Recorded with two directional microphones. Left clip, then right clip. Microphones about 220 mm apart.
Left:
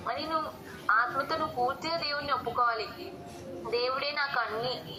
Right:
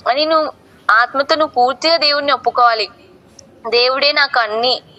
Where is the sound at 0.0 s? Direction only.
40° right (ahead or behind).